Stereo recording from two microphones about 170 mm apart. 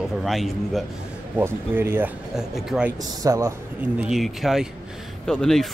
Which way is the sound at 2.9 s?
20° right (ahead or behind).